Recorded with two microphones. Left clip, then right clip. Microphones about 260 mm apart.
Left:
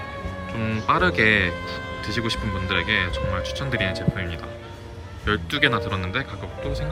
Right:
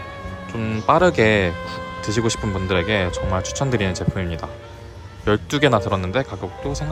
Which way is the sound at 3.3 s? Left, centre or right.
Right.